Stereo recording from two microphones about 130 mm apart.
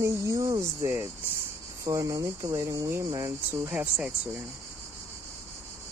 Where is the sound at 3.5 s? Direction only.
15° right (ahead or behind).